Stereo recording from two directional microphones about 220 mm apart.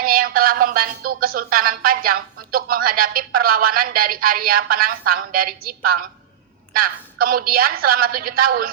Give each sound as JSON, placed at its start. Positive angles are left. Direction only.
{"t": 0.0, "sound": "speech", "side_deg": -40}